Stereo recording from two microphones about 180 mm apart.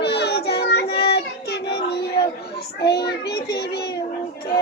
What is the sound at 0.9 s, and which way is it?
Child singing, 30° left (ahead or behind).